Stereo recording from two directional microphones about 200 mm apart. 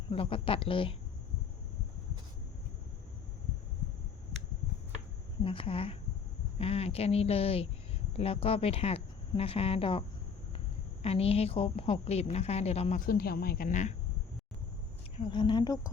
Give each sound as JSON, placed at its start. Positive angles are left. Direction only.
{"t": 0.1, "sound": "speech", "side_deg": 25}
{"t": 5.4, "sound": "speech", "side_deg": 25}
{"t": 11.0, "sound": "a woman's voice", "side_deg": 30}
{"t": 13.1, "sound": "a woman's voice", "side_deg": 50}
{"t": 15.2, "sound": "speech", "side_deg": 20}